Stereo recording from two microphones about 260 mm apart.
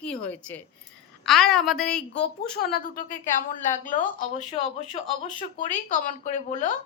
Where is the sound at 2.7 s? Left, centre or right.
Left.